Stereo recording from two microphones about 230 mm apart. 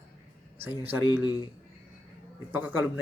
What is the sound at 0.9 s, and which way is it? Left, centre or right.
Speech, centre.